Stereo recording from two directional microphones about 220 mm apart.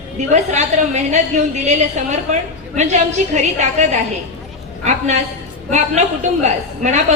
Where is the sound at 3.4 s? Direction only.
30° right (ahead or behind).